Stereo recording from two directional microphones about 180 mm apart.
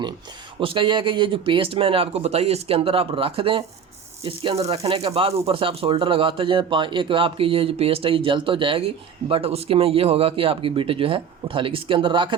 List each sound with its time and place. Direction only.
0.6 s speech: 30° right (ahead or behind)